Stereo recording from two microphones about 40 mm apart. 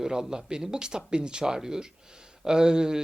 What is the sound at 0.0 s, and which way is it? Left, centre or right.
Speech, centre.